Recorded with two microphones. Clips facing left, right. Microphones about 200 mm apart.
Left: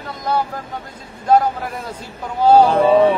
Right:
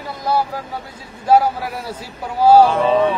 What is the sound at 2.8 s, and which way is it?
Music, 25° left (ahead or behind).